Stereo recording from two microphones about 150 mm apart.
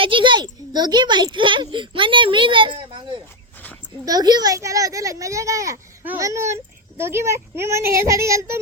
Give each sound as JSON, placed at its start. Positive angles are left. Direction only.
{"t": 0.0, "sound": "a child's voice", "side_deg": -35}